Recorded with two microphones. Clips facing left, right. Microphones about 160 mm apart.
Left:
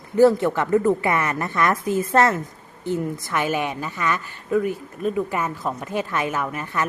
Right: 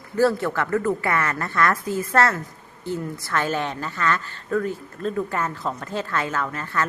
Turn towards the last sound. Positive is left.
turn(degrees=15)  # may be behind; listen again after turning